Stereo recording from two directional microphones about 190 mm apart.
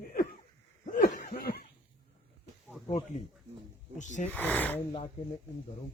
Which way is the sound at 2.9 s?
35° left (ahead or behind).